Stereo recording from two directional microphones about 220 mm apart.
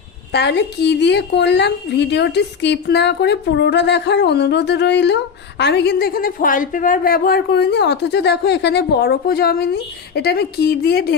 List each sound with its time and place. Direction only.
0.3 s a woman's voice: 50° left (ahead or behind)